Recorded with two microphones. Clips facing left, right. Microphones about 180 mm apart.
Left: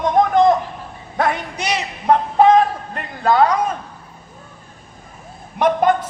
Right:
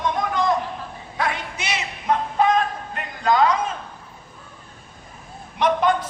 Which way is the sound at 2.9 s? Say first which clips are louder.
Left 2 dB; 60° left (ahead or behind).